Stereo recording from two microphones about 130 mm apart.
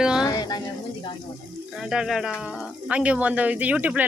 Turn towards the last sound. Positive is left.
turn(degrees=-10)  # may be behind; listen again after turning